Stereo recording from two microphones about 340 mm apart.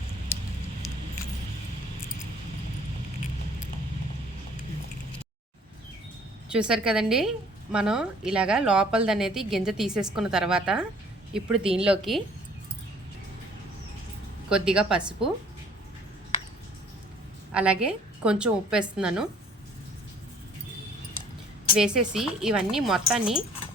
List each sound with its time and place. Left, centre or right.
6.5 s a woman's voice: centre
14.5 s a woman's voice: centre
17.5 s a woman's voice: centre
21.8 s a woman's voice: centre